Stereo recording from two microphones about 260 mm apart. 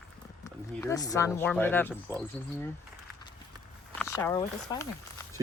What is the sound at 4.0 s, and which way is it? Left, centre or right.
Speech, centre.